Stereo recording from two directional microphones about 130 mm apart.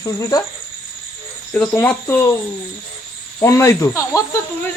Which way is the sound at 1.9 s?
15° left (ahead or behind).